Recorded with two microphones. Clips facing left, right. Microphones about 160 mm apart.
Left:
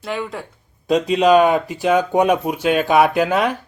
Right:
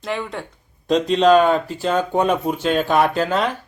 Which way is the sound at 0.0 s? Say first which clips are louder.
Even; centre (ahead or behind).